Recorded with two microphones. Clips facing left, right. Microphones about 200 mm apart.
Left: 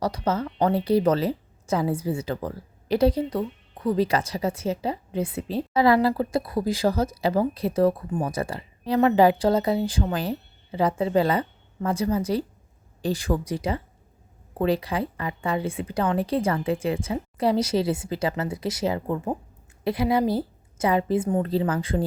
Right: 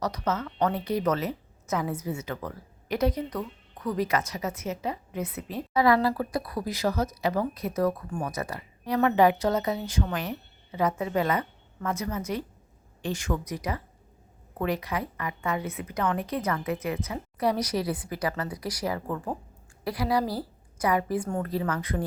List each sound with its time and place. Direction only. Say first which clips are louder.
0.0 s a woman's voice: left 4 dB; 30° left (ahead or behind)